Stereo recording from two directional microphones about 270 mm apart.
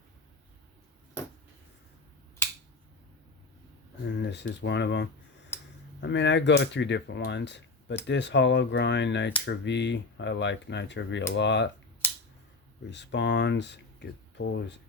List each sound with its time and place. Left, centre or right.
4.0 s speech: left
12.9 s speech: left